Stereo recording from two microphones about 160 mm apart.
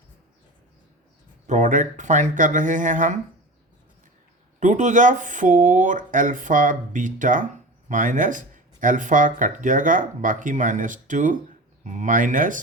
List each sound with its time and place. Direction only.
1.5 s speech: 50° right (ahead or behind)
4.6 s speech: 50° right (ahead or behind)